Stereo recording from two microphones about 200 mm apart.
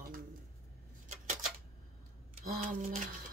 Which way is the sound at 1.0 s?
40° right (ahead or behind).